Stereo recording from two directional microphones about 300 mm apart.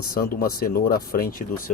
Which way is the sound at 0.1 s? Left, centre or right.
Left.